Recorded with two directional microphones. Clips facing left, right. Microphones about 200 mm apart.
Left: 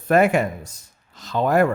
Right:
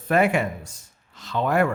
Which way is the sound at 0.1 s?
45° left (ahead or behind).